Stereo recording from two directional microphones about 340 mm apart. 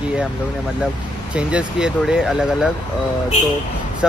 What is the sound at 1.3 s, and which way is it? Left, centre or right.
Speech, centre.